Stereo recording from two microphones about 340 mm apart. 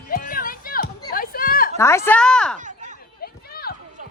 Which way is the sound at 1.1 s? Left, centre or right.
Left.